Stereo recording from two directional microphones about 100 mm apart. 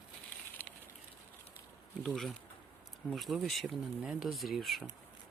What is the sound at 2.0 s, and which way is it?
Speech, centre (ahead or behind).